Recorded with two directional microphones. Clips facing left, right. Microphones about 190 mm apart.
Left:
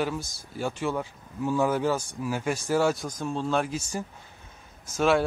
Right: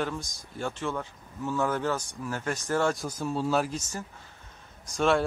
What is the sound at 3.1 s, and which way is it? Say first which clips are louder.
Speech: even; 5° right (ahead or behind).